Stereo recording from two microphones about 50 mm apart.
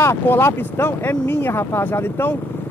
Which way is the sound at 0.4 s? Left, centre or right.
Left.